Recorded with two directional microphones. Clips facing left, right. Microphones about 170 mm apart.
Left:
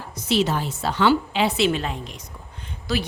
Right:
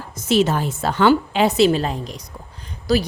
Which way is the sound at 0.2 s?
45° right (ahead or behind).